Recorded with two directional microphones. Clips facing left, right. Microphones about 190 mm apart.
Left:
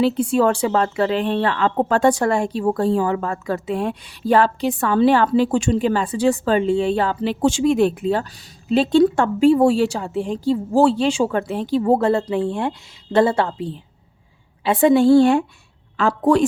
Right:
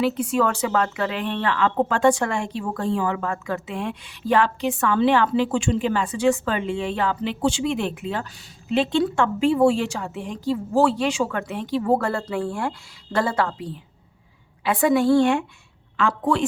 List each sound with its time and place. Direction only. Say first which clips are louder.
0.0 s a woman's voice: left 4 dB; 30° left (ahead or behind)